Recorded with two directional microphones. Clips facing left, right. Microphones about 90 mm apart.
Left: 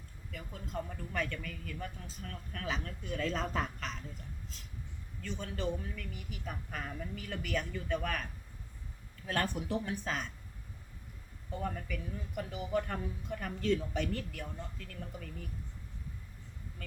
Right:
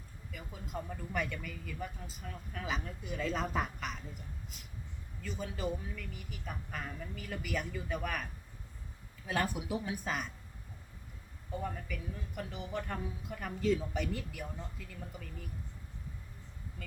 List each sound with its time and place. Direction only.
0.3 s speech: 5° right (ahead or behind)
5.2 s speech: 5° right (ahead or behind)
11.5 s speech: 5° right (ahead or behind)